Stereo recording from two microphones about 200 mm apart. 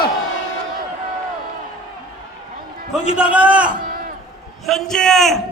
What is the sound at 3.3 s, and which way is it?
Speech, 5° right (ahead or behind).